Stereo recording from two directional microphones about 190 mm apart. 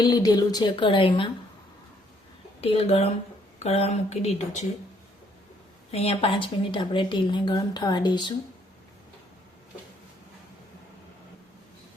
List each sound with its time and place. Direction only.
0.0 s speech: 20° left (ahead or behind)
2.6 s speech: 30° left (ahead or behind)
5.9 s speech: 30° left (ahead or behind)